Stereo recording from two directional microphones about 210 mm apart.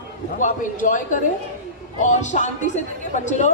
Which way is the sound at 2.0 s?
35° left (ahead or behind).